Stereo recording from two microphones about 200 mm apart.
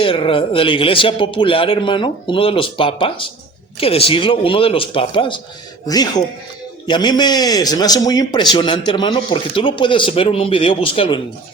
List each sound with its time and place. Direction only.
0.0 s a man's voice: 25° left (ahead or behind)